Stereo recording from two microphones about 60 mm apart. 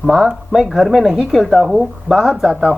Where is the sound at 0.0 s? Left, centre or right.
Centre.